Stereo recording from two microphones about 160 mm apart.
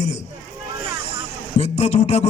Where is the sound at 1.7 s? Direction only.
45° left (ahead or behind).